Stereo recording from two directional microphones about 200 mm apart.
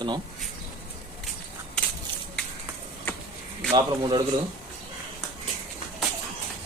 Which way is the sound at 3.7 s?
25° right (ahead or behind).